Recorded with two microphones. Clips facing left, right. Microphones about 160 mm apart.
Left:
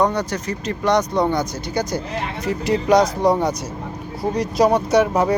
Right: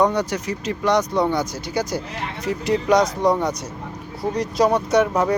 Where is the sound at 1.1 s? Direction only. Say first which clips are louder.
Left 1 dB; 20° left (ahead or behind).